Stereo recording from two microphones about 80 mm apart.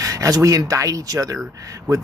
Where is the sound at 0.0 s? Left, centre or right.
Right.